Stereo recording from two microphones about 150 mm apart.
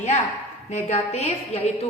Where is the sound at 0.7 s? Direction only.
50° left (ahead or behind).